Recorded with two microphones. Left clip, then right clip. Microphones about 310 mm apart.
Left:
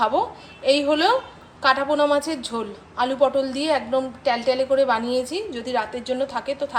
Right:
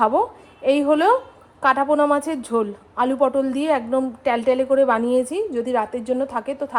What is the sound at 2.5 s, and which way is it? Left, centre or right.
Speech, centre.